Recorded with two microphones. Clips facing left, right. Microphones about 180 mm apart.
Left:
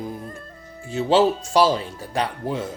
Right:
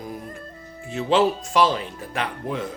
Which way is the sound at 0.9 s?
30° left (ahead or behind).